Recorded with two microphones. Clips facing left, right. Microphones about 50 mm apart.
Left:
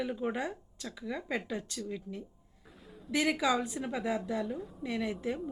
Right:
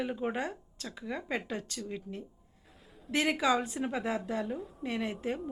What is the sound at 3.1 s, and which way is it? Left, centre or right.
Speech, right.